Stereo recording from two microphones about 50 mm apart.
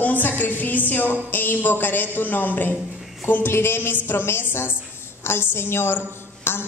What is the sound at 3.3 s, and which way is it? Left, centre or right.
A man's voice, left.